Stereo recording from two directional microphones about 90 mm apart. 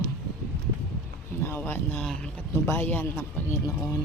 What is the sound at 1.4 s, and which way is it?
Speech, 25° left (ahead or behind).